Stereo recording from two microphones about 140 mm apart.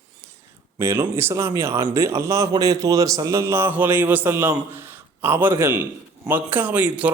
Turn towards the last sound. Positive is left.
turn(degrees=-10)  # may be behind; listen again after turning